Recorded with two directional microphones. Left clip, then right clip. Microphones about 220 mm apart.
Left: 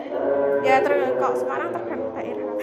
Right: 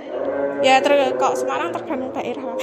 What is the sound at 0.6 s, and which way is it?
Speech, 45° right (ahead or behind).